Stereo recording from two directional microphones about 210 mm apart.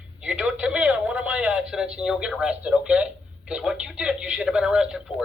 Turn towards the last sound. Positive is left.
turn(degrees=-5)  # may be behind; listen again after turning